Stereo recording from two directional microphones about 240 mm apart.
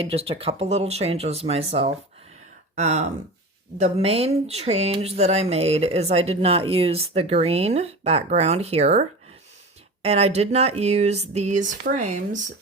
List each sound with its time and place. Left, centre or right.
0.0 s speech: right